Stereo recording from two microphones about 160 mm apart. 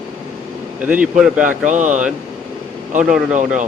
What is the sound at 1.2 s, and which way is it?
Speech, 5° right (ahead or behind).